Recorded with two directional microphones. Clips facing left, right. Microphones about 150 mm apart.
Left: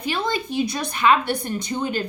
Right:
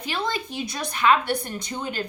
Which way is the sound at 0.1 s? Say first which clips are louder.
Left 4 dB; 15° left (ahead or behind).